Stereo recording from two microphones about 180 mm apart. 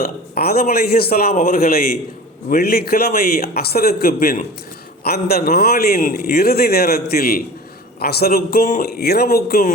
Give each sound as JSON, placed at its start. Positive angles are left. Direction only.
{"t": 0.0, "sound": "a man's voice", "side_deg": 60}